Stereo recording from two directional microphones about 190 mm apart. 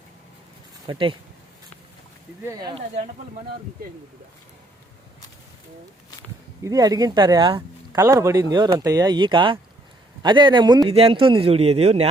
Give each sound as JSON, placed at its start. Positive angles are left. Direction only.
{"t": 0.9, "sound": "speech", "side_deg": -25}
{"t": 2.4, "sound": "speech", "side_deg": -15}
{"t": 6.6, "sound": "speech", "side_deg": -20}